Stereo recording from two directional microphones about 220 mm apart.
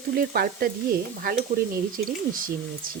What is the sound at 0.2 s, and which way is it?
Speech, 45° right (ahead or behind).